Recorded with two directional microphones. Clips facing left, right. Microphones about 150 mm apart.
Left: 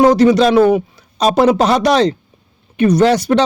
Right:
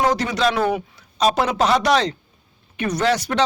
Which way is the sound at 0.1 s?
35° left (ahead or behind).